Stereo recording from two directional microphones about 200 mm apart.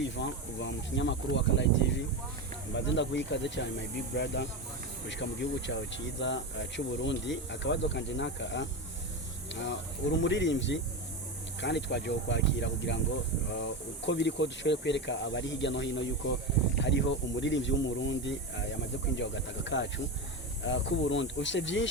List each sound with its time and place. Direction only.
0.0 s speech: 65° left (ahead or behind)